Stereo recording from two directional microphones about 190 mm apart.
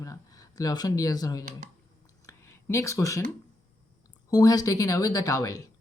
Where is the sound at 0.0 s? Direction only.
20° left (ahead or behind).